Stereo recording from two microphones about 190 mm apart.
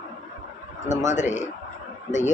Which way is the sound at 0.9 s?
40° left (ahead or behind).